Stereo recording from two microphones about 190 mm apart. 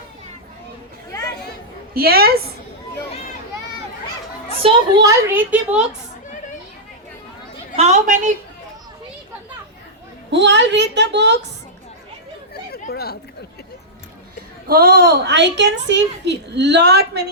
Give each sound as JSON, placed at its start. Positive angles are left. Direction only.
{"t": 1.9, "sound": "a woman's voice", "side_deg": -55}
{"t": 4.6, "sound": "a woman's voice", "side_deg": -30}
{"t": 5.0, "sound": "speech", "side_deg": -10}
{"t": 7.8, "sound": "a woman's voice", "side_deg": -40}
{"t": 10.3, "sound": "a woman's voice", "side_deg": -70}
{"t": 12.7, "sound": "chatter", "side_deg": 55}
{"t": 14.7, "sound": "a woman's voice", "side_deg": -50}